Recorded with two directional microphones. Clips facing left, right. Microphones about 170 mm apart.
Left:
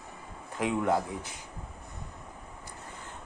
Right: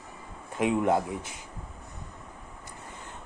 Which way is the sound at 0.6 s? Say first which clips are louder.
Right 3 dB; 20° right (ahead or behind).